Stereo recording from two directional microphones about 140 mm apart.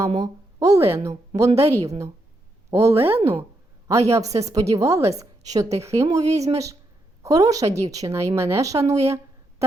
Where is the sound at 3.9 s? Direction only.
20° right (ahead or behind).